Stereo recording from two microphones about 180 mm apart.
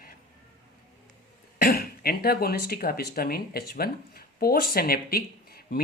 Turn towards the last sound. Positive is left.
turn(degrees=55)  # may be behind; listen again after turning